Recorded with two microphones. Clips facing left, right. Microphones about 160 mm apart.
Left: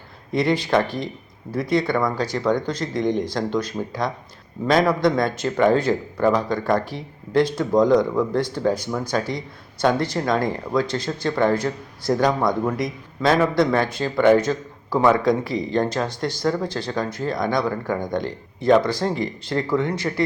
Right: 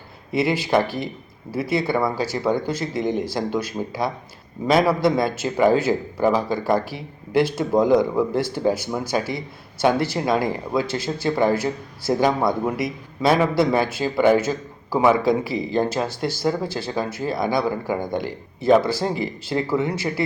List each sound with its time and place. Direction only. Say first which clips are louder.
0.3 s speech: even; 5° right (ahead or behind)